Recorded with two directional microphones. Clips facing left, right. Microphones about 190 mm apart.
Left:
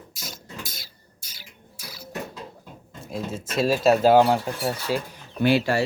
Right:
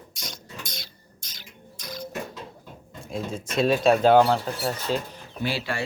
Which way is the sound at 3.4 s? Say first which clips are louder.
Even; 5° left (ahead or behind).